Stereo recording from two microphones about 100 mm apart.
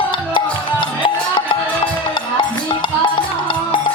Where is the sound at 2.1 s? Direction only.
50° left (ahead or behind).